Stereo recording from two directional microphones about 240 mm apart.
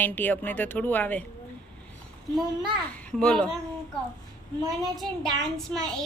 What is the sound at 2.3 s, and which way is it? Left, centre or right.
A child's voice, centre.